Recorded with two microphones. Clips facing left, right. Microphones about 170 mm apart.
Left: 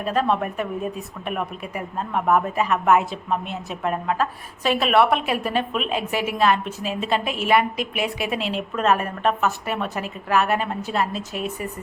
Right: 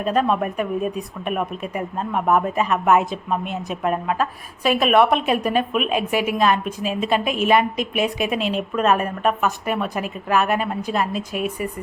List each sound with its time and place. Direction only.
0.0 s a woman's voice: 20° right (ahead or behind)